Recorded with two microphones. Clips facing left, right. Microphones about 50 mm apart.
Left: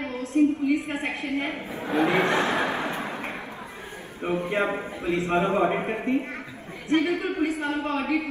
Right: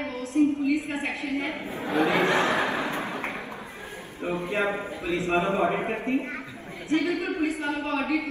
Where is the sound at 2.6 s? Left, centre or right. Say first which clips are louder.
Even; left.